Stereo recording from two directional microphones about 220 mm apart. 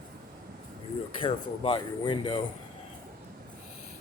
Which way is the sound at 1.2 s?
25° left (ahead or behind).